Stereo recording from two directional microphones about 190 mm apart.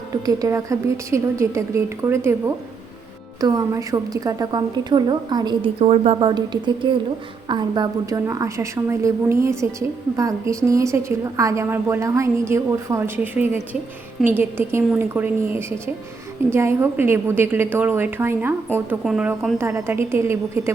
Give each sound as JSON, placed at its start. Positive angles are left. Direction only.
{"t": 0.1, "sound": "a woman's voice", "side_deg": -20}
{"t": 3.4, "sound": "a woman's voice", "side_deg": -20}